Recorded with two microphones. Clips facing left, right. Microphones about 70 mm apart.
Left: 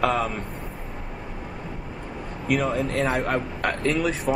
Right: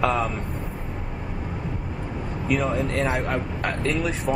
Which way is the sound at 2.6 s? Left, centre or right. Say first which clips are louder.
Even; centre.